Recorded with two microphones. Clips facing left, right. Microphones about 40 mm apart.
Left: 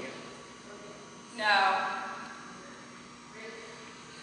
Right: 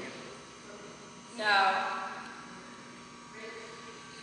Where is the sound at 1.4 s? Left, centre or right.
Centre.